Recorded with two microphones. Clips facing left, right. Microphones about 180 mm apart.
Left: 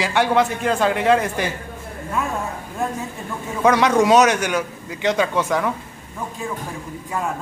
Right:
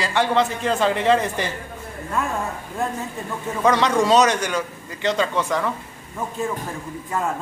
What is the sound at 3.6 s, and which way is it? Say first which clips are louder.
A man's voice: left 3 dB; 10° left (ahead or behind).